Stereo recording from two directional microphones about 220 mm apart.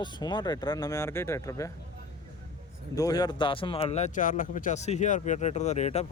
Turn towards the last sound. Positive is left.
turn(degrees=30)  # may be behind; listen again after turning